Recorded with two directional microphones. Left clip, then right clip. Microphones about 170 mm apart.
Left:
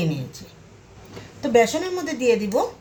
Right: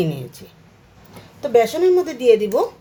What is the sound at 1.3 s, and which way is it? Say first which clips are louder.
A woman's voice: right 2 dB; 35° right (ahead or behind).